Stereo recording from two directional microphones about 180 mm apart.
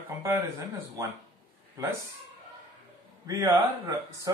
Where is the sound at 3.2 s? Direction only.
20° right (ahead or behind).